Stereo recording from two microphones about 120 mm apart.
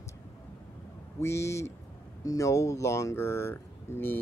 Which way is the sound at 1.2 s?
25° left (ahead or behind).